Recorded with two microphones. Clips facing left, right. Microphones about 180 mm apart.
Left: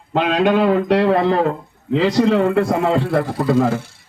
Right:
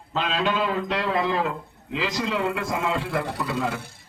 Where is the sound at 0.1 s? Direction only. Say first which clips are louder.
Left 9 dB; 60° left (ahead or behind).